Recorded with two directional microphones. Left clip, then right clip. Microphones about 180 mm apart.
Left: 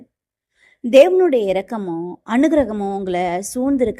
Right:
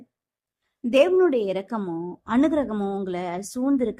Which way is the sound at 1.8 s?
Centre (ahead or behind).